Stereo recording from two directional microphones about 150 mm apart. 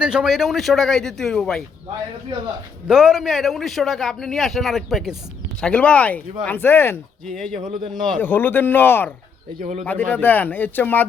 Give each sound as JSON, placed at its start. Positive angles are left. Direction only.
{"t": 0.0, "sound": "a man's voice", "side_deg": -5}
{"t": 2.8, "sound": "a man's voice", "side_deg": -5}
{"t": 7.6, "sound": "speech", "side_deg": -35}
{"t": 8.2, "sound": "speech", "side_deg": 15}
{"t": 9.6, "sound": "speech", "side_deg": -50}
{"t": 9.8, "sound": "speech", "side_deg": 10}